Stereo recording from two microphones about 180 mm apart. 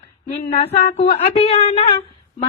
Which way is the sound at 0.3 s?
35° left (ahead or behind).